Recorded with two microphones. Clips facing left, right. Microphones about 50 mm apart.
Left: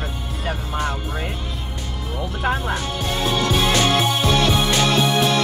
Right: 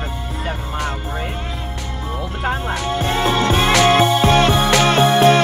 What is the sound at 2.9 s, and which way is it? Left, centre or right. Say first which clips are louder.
Music: right 8 dB; right.